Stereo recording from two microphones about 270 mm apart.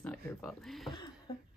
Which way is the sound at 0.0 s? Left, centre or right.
Centre.